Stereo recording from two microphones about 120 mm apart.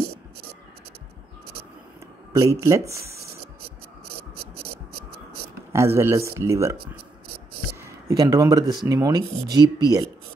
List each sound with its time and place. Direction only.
2.3 s speech: 30° right (ahead or behind)
5.7 s speech: 25° right (ahead or behind)
7.8 s speech: 30° right (ahead or behind)